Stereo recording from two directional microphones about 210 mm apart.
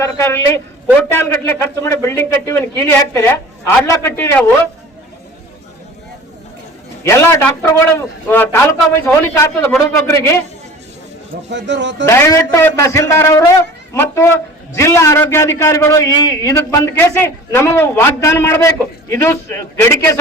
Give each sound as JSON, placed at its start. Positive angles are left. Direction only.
{"t": 0.0, "sound": "a man's voice", "side_deg": 10}
{"t": 7.0, "sound": "a man's voice", "side_deg": 15}
{"t": 11.4, "sound": "speech", "side_deg": -60}
{"t": 12.0, "sound": "a man's voice", "side_deg": 15}